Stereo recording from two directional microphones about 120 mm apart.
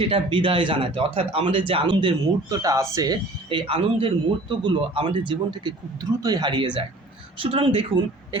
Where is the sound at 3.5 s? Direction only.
50° right (ahead or behind).